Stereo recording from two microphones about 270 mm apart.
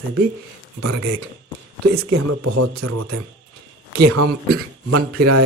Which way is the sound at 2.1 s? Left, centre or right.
Right.